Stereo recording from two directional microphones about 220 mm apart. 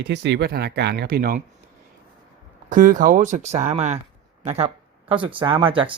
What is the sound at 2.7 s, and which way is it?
Speech, 35° right (ahead or behind).